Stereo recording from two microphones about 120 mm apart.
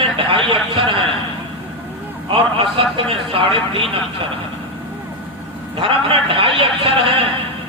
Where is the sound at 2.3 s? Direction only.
50° right (ahead or behind).